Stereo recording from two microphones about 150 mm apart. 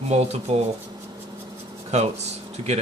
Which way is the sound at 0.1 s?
45° right (ahead or behind).